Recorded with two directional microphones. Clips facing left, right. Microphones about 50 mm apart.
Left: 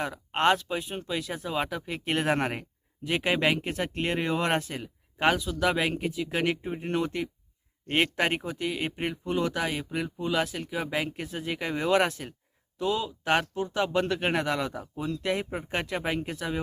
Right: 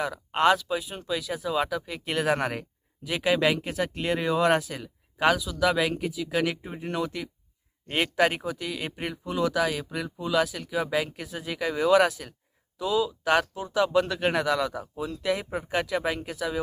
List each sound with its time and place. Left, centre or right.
0.0 s speech: left
2.3 s speech: centre
7.9 s speech: centre
14.6 s speech: centre
15.2 s speech: left